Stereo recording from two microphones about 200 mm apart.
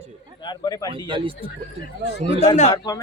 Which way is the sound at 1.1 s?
25° right (ahead or behind).